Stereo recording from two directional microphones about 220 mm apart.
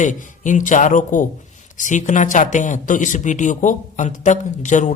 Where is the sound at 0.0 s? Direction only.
35° left (ahead or behind).